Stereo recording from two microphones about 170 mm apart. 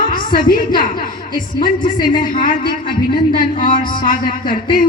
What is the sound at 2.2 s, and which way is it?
A woman's voice, 55° left (ahead or behind).